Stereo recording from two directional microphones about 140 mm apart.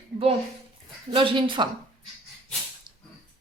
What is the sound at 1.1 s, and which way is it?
Speech, 40° right (ahead or behind).